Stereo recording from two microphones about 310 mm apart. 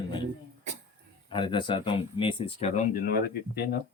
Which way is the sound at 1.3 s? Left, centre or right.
Centre.